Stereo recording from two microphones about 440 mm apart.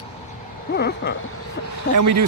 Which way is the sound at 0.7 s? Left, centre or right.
Left.